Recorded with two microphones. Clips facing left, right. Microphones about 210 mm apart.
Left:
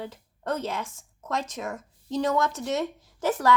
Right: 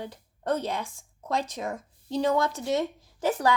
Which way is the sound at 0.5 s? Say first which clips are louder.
Right 1 dB; 35° right (ahead or behind).